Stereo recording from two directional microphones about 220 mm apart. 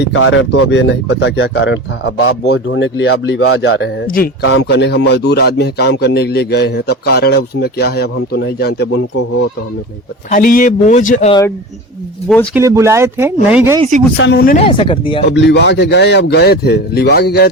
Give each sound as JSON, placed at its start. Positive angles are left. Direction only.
{"t": 0.1, "sound": "speech", "side_deg": 60}
{"t": 4.4, "sound": "speech", "side_deg": 55}
{"t": 10.2, "sound": "a man's voice", "side_deg": 35}
{"t": 11.3, "sound": "speech", "side_deg": 15}
{"t": 12.5, "sound": "speech", "side_deg": -15}
{"t": 14.2, "sound": "speech", "side_deg": 50}
{"t": 14.6, "sound": "speech", "side_deg": 25}
{"t": 15.3, "sound": "speech", "side_deg": 50}